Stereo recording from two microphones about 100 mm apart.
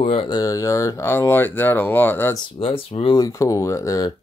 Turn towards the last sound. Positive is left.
turn(degrees=35)  # may be behind; listen again after turning